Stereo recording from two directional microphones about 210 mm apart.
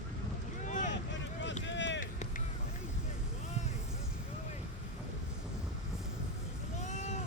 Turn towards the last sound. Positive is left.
turn(degrees=35)  # may be behind; listen again after turning